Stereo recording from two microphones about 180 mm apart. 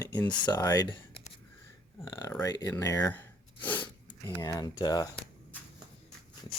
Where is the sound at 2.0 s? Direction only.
20° left (ahead or behind).